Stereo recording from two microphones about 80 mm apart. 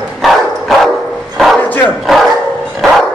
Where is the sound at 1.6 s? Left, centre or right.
Left.